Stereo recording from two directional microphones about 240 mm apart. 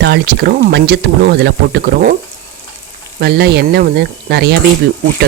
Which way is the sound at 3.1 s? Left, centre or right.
Right.